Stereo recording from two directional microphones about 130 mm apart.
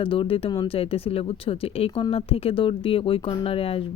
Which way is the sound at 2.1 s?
45° left (ahead or behind).